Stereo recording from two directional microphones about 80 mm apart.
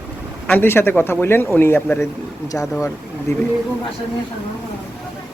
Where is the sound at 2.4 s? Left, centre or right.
Left.